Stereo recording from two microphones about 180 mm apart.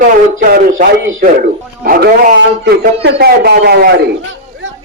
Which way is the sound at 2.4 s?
75° right (ahead or behind).